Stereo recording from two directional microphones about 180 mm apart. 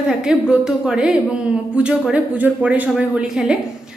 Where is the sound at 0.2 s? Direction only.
5° right (ahead or behind).